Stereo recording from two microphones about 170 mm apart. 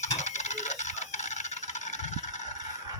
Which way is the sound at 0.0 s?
45° left (ahead or behind).